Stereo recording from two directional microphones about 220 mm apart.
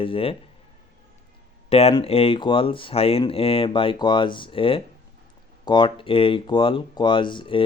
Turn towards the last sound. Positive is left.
turn(degrees=20)  # may be behind; listen again after turning